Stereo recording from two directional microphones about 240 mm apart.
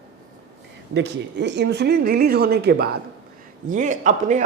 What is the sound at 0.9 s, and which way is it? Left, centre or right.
A man's voice, right.